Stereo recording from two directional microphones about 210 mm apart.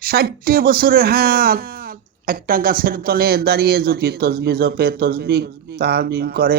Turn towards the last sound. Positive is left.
turn(degrees=-45)  # may be behind; listen again after turning